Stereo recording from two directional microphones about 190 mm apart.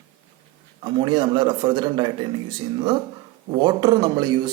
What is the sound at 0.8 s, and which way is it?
Speech, 25° right (ahead or behind).